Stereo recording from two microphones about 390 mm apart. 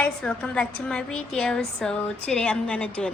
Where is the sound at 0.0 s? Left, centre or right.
Centre.